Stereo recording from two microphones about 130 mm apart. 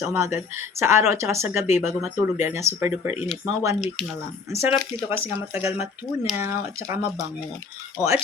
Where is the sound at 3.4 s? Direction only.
25° right (ahead or behind).